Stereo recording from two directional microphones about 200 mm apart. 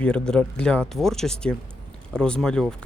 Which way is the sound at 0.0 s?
5° left (ahead or behind).